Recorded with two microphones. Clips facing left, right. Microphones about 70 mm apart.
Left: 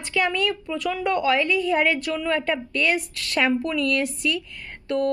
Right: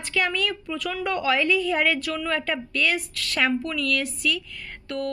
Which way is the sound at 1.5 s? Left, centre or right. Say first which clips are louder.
Left 1 dB; centre.